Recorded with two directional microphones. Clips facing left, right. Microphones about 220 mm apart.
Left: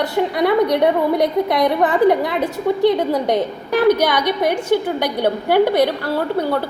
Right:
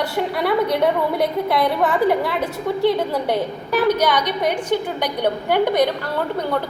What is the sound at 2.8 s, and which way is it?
A woman's voice, 15° left (ahead or behind).